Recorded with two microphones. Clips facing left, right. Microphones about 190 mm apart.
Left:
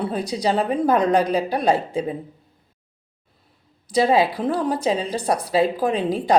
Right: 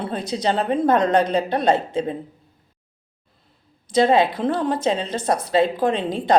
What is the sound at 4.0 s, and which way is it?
A woman's voice, 5° left (ahead or behind).